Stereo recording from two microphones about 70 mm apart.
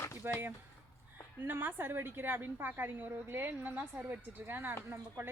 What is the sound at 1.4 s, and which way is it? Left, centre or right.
A woman's voice, right.